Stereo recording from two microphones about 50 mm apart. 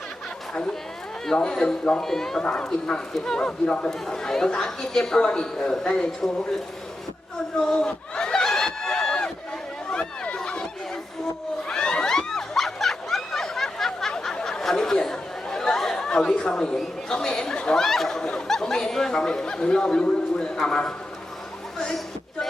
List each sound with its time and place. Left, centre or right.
1.3 s speech: centre
2.0 s speech: centre
2.4 s speech: centre
7.7 s a sound: centre
11.7 s a sound: centre
14.6 s chatter: centre
17.1 s speech: centre